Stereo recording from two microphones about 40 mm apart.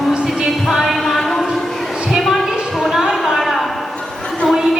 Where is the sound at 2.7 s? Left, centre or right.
Centre.